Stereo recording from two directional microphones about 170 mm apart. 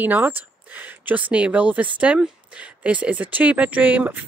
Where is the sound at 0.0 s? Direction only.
10° right (ahead or behind).